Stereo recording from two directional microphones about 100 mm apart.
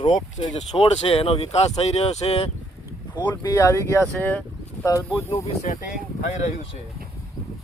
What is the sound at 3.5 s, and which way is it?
Speech, 30° left (ahead or behind).